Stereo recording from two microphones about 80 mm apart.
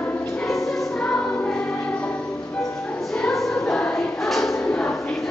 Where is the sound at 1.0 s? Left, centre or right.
Centre.